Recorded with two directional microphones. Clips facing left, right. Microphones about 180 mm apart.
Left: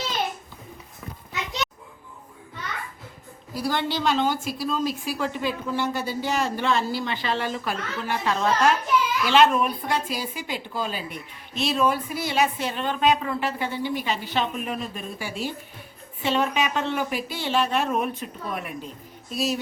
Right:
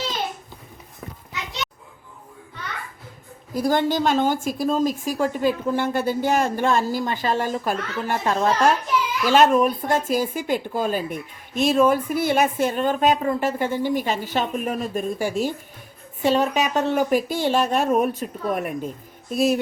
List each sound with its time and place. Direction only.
3.5 s a woman's voice: 45° right (ahead or behind)